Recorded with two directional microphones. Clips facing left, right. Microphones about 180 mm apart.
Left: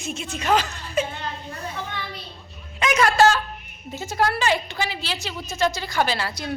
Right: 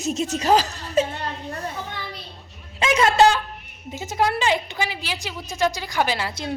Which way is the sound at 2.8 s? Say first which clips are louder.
Right 1 dB; 30° right (ahead or behind).